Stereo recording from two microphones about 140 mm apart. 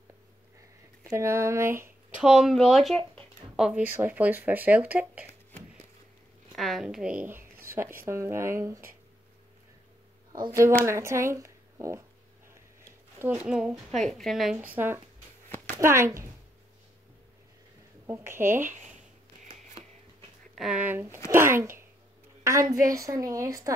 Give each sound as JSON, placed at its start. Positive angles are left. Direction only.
{"t": 1.0, "sound": "speech", "side_deg": -20}
{"t": 2.1, "sound": "a woman's voice", "side_deg": -5}
{"t": 6.5, "sound": "a woman's voice", "side_deg": 0}
{"t": 10.4, "sound": "a woman's voice", "side_deg": -20}
{"t": 13.2, "sound": "a woman's voice", "side_deg": -5}
{"t": 18.0, "sound": "speech", "side_deg": -15}
{"t": 20.5, "sound": "speech", "side_deg": -5}
{"t": 22.8, "sound": "speech", "side_deg": -25}